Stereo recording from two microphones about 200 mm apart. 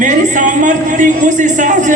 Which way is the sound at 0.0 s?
40° right (ahead or behind).